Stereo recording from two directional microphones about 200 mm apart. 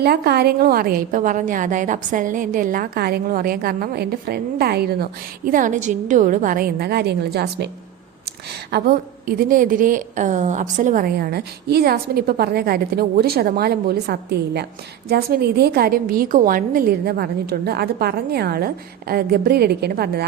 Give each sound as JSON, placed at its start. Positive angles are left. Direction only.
{"t": 0.0, "sound": "a woman's voice", "side_deg": -50}
{"t": 8.7, "sound": "a woman's voice", "side_deg": -50}